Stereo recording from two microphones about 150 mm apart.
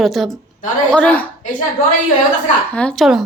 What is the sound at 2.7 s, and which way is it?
Speech, 5° left (ahead or behind).